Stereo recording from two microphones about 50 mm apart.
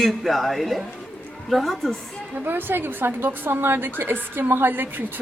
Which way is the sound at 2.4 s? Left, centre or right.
Right.